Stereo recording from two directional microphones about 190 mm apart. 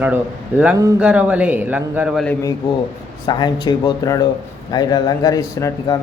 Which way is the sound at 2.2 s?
15° left (ahead or behind).